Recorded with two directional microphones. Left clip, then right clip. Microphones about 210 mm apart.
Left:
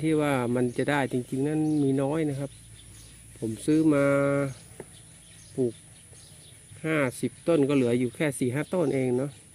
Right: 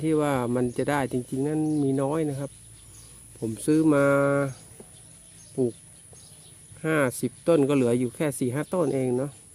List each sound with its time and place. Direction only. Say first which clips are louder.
0.0 s speech: right 1 dB; 10° right (ahead or behind)
3.4 s speech: right 1 dB; 20° right (ahead or behind)
5.6 s speech: right 2 dB; 20° right (ahead or behind)
6.8 s speech: right 2 dB; 20° right (ahead or behind)